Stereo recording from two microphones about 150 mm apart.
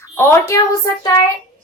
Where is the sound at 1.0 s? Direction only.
25° left (ahead or behind).